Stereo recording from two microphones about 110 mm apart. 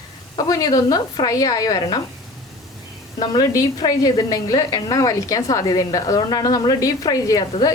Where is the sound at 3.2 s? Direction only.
40° left (ahead or behind).